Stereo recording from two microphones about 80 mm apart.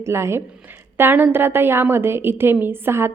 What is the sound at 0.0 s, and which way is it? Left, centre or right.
A woman's voice, right.